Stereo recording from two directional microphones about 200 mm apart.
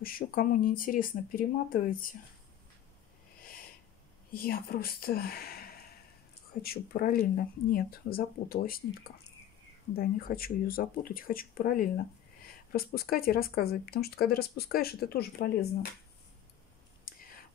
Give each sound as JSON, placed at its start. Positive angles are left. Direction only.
{"t": 0.0, "sound": "speech", "side_deg": 45}
{"t": 4.3, "sound": "speech", "side_deg": 45}
{"t": 9.9, "sound": "speech", "side_deg": 50}